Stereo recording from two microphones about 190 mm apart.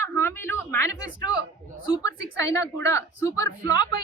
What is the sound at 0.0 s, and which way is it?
Speech, 10° left (ahead or behind).